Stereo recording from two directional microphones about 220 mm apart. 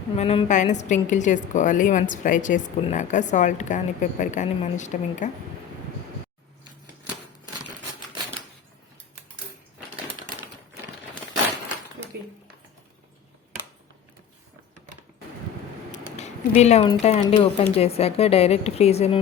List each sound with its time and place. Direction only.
0.2 s a woman's voice: 30° left (ahead or behind)
16.1 s a sound: 30° left (ahead or behind)
17.0 s speech: 30° left (ahead or behind)